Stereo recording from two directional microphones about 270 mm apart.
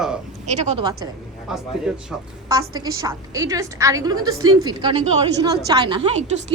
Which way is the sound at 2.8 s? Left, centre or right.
Centre.